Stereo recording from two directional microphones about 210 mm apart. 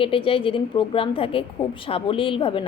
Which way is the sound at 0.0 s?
25° left (ahead or behind).